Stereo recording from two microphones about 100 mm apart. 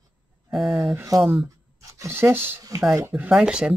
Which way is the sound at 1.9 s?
25° right (ahead or behind).